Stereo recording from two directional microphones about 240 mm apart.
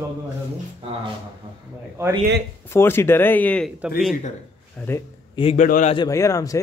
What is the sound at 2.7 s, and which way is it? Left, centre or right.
Speech, centre.